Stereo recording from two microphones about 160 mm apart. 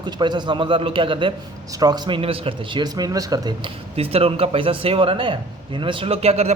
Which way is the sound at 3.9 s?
35° right (ahead or behind).